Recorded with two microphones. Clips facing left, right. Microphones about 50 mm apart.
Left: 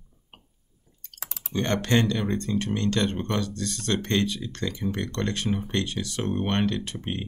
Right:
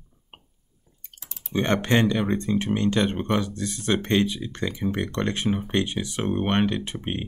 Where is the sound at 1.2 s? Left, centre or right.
Left.